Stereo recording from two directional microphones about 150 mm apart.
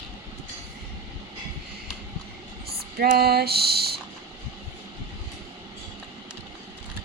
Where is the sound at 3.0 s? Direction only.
90° right.